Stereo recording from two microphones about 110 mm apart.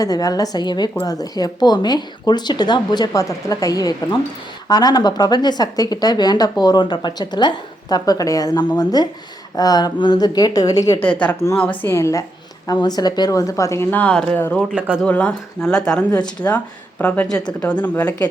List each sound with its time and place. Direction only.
0.0 s speech: 35° left (ahead or behind)
11.0 s a woman's voice: 15° left (ahead or behind)
12.6 s speech: 40° left (ahead or behind)
14.0 s speech: 10° left (ahead or behind)
14.7 s speech: 10° right (ahead or behind)
15.0 s speech: 10° left (ahead or behind)